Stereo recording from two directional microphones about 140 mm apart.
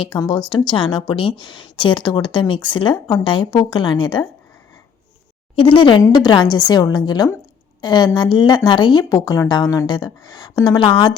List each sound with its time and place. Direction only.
0.2 s a woman's voice: 30° left (ahead or behind)
5.5 s a woman's voice: 40° left (ahead or behind)